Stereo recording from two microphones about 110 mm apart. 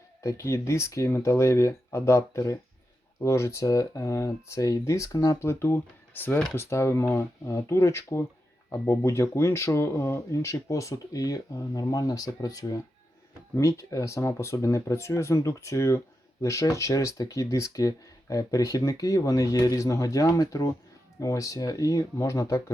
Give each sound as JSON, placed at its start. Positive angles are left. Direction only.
{"t": 0.2, "sound": "speech", "side_deg": 25}